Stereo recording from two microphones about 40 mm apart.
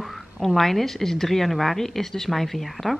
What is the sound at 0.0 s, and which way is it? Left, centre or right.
A woman's voice, centre.